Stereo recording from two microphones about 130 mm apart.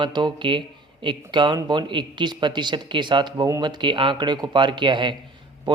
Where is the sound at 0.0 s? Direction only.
40° right (ahead or behind).